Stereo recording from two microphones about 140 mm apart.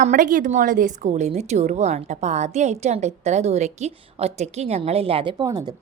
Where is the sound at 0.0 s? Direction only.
65° right (ahead or behind); by 5.7 s 30° right (ahead or behind).